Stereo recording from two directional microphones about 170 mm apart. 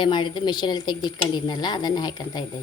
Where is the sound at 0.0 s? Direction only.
30° left (ahead or behind).